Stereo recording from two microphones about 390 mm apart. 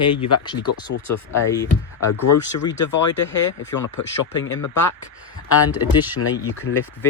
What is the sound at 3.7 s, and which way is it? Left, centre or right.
Speech, left.